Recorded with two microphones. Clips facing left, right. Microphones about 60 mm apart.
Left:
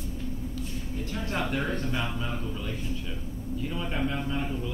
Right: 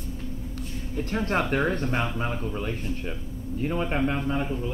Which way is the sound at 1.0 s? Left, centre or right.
Right.